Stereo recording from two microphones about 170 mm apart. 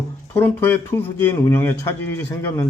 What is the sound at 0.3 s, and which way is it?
A man's voice, 10° left (ahead or behind).